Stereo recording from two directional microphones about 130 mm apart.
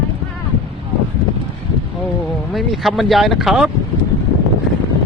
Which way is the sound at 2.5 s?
Centre (ahead or behind).